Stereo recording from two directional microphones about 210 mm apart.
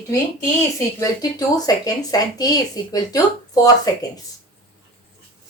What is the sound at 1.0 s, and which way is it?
Speech, 20° left (ahead or behind).